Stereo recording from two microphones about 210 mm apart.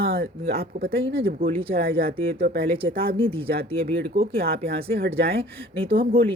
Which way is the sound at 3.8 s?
40° right (ahead or behind).